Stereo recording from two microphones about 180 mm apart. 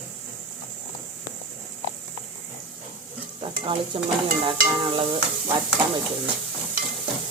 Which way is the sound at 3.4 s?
30° right (ahead or behind).